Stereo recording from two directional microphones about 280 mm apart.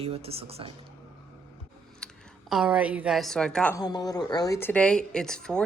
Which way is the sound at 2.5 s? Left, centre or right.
Centre.